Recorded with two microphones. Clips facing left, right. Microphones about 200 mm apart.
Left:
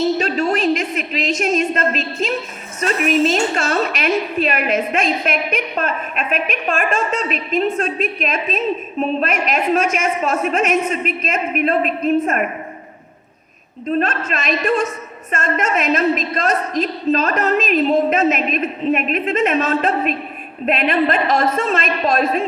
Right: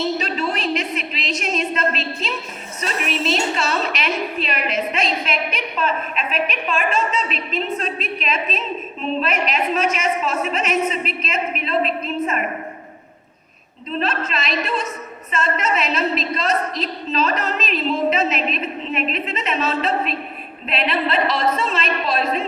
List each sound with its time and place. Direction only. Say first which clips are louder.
0.0 s a woman's voice: left 5 dB; 45° left (ahead or behind)
13.8 s a woman's voice: left 4 dB; 50° left (ahead or behind)